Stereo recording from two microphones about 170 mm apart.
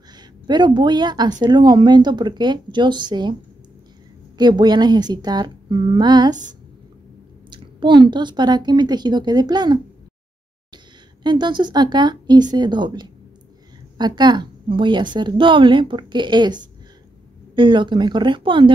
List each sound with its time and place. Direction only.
0.1 s a woman's voice: 25° right (ahead or behind)
4.4 s a woman's voice: 25° right (ahead or behind)
7.4 s a woman's voice: 25° right (ahead or behind)
11.2 s a woman's voice: 25° right (ahead or behind)